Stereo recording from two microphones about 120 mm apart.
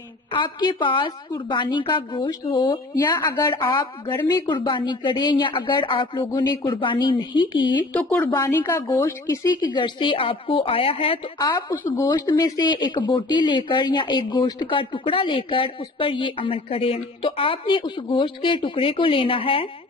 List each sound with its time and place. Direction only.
0.3 s a woman's voice: 40° left (ahead or behind)
7.9 s a woman's voice: 10° left (ahead or behind); by 11.1 s 50° left (ahead or behind)
11.7 s a woman's voice: 20° left (ahead or behind)
12.1 s speech: 35° left (ahead or behind)